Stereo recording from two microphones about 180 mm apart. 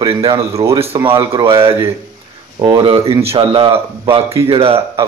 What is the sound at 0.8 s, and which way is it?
Speech, 30° right (ahead or behind).